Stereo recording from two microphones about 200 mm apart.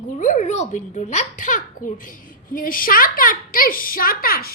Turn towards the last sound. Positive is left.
turn(degrees=45)  # may be behind; listen again after turning